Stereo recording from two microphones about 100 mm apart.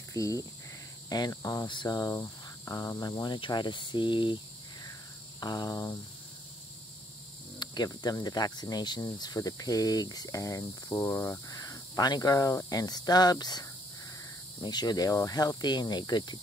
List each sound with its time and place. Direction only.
0.1 s speech: 35° left (ahead or behind)
1.7 s cricket: 45° left (ahead or behind)
3.2 s speech: 50° left (ahead or behind)
5.4 s speech: 40° left (ahead or behind)
7.5 s speech: 45° left (ahead or behind)